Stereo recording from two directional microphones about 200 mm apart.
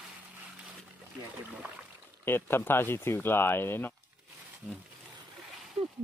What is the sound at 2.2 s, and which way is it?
Speech, 10° left (ahead or behind).